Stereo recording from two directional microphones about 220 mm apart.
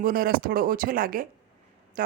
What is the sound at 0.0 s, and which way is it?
A man's voice, 40° right (ahead or behind).